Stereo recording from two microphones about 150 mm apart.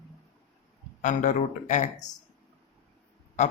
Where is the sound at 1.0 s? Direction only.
55° left (ahead or behind).